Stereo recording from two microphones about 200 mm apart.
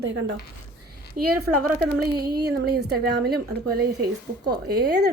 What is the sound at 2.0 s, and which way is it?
A woman's voice, 50° right (ahead or behind).